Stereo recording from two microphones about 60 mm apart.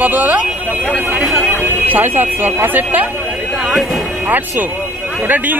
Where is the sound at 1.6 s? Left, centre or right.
Right.